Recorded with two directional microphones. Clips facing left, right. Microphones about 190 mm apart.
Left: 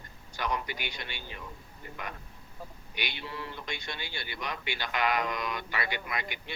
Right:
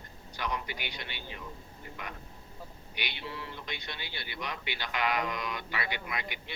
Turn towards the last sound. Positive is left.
turn(degrees=45)  # may be behind; listen again after turning